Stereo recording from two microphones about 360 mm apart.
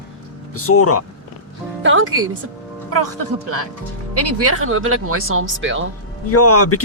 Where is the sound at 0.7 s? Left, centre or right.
Left.